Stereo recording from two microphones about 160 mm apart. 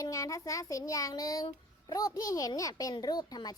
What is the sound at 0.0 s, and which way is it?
A child's voice, 20° left (ahead or behind).